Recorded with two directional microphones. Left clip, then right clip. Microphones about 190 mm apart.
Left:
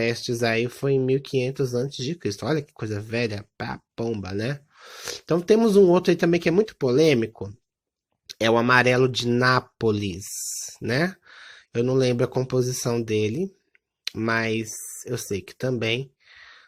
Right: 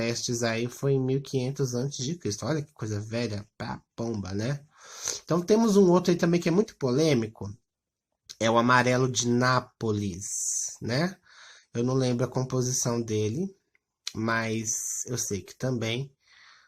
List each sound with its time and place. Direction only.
0.0 s speech: 20° left (ahead or behind)